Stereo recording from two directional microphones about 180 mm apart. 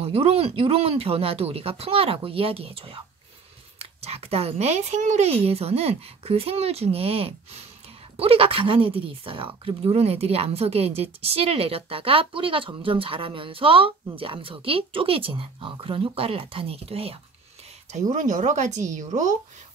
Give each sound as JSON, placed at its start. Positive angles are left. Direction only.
{"t": 0.0, "sound": "a woman's voice", "side_deg": -35}
{"t": 18.1, "sound": "a woman's voice", "side_deg": -45}